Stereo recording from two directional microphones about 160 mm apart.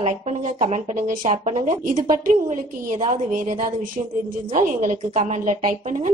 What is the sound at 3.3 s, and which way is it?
A woman's voice, 50° right (ahead or behind).